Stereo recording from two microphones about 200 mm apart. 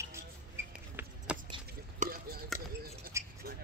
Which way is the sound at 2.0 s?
50° right (ahead or behind).